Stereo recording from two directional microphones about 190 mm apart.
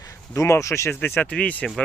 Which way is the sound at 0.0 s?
15° left (ahead or behind).